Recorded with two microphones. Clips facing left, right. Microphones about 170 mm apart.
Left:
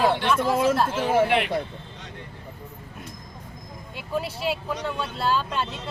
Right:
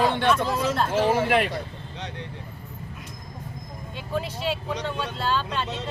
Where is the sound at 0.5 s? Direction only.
50° left (ahead or behind).